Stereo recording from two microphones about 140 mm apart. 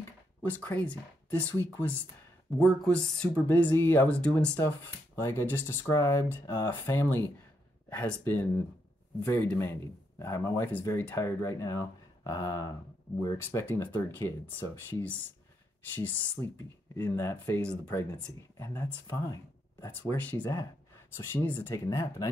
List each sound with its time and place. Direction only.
0.4 s speech: 15° left (ahead or behind)
2.6 s speech: 5° left (ahead or behind)
18.6 s speech: 20° left (ahead or behind)
19.9 s speech: 10° left (ahead or behind)